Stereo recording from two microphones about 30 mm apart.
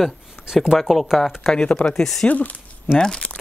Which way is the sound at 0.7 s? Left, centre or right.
Centre.